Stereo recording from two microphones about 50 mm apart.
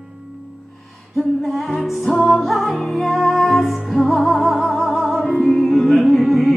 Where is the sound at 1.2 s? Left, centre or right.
Centre.